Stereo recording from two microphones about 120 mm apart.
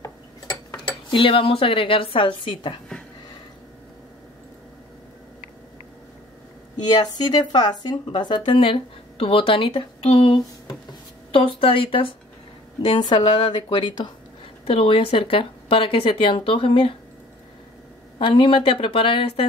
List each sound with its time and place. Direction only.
1.1 s speech: 50° left (ahead or behind)
6.9 s speech: 35° left (ahead or behind)
14.6 s speech: 50° left (ahead or behind)
18.2 s speech: 45° left (ahead or behind)